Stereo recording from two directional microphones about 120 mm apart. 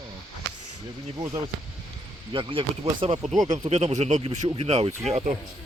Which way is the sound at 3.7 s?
75° right (ahead or behind).